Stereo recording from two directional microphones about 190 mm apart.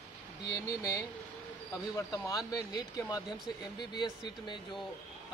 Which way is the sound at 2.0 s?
15° left (ahead or behind).